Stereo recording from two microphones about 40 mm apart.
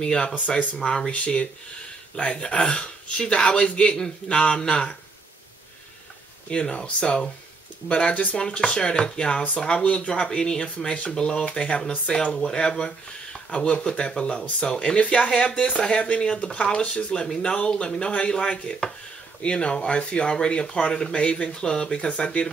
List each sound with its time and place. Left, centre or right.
0.0 s speech: centre
1.1 s speech: left
6.5 s speech: left
8.1 s speech: left
8.4 s speech: left